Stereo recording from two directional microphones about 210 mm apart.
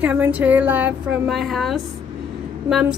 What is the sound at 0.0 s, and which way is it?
A woman's voice, 10° right (ahead or behind).